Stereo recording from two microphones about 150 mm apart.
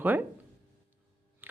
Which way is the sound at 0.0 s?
10° right (ahead or behind).